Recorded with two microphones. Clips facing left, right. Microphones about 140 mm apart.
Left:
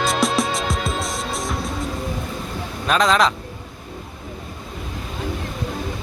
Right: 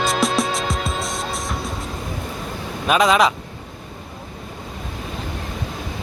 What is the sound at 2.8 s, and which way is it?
Speech, 10° right (ahead or behind).